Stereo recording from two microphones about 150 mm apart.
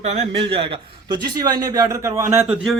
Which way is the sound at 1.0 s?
30° right (ahead or behind).